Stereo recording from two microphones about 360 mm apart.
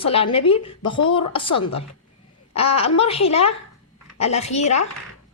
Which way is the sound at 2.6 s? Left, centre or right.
Left.